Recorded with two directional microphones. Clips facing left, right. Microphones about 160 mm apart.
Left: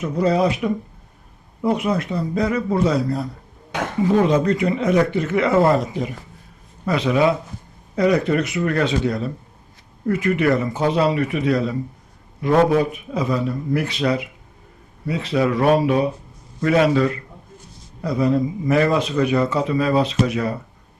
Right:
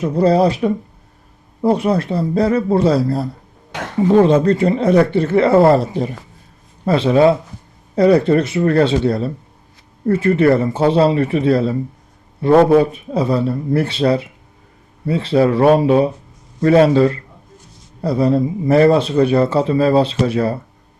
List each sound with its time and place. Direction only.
0.0 s a man's voice: 35° right (ahead or behind)